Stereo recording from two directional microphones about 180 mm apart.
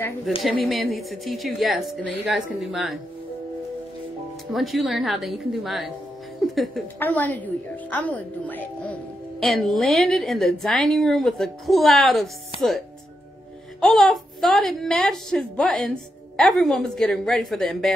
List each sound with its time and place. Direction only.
0.7 s a woman's voice: centre (ahead or behind)
4.5 s a woman's voice: centre (ahead or behind)